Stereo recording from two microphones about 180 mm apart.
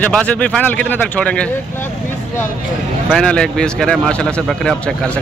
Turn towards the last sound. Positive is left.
turn(degrees=5)  # may be behind; listen again after turning